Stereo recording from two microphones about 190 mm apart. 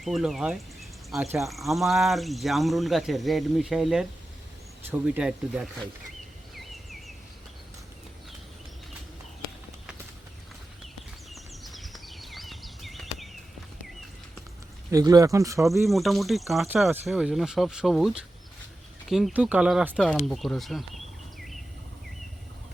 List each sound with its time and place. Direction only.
0.0 s speech: centre (ahead or behind)
11.3 s a sound: centre (ahead or behind)
14.8 s speech: 20° right (ahead or behind)
15.9 s speech: centre (ahead or behind)